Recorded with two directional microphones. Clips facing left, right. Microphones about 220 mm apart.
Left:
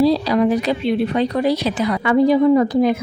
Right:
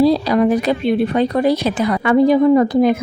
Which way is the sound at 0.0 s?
50° right (ahead or behind).